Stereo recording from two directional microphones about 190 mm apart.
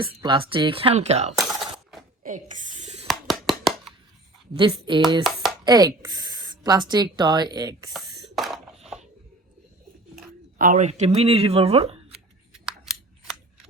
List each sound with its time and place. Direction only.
0.1 s speech: 25° right (ahead or behind)
1.4 s coin: centre (ahead or behind)
2.2 s a sound: 40° right (ahead or behind)
3.1 s a sound: centre (ahead or behind)
4.5 s speech: 25° right (ahead or behind)
5.2 s chopping: centre (ahead or behind)
5.6 s speech: 20° right (ahead or behind)
8.4 s a sound: centre (ahead or behind)
10.6 s speech: 40° right (ahead or behind)
12.5 s scissors: centre (ahead or behind)